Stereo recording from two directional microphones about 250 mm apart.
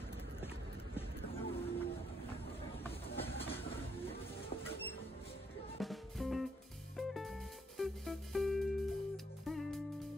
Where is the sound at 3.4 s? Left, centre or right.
Left.